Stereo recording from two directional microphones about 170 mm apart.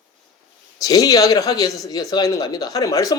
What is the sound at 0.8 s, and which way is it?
Speech, 20° left (ahead or behind).